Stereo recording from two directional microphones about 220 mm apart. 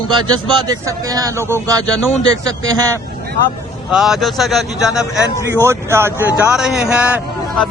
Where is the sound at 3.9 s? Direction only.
Centre (ahead or behind).